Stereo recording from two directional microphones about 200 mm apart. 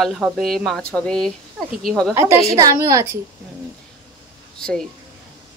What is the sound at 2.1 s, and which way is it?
Speech, 15° right (ahead or behind).